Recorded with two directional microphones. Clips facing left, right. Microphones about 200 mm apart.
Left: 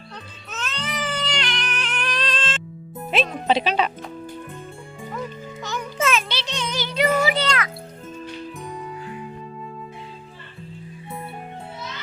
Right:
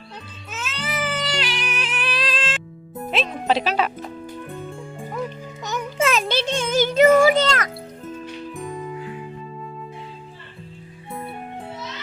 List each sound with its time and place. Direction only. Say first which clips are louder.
0.6 s music: right 2 dB; 5° right (ahead or behind)
3.1 s speech: left 1 dB; centre (ahead or behind)
6.0 s music: right 2 dB; 35° right (ahead or behind)
6.2 s music: right 7 dB; 50° right (ahead or behind)